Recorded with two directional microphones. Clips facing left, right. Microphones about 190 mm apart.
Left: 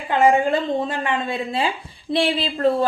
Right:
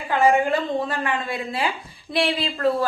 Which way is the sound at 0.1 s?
25° left (ahead or behind).